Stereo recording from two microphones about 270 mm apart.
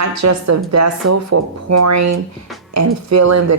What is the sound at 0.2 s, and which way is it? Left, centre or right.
Speech, right.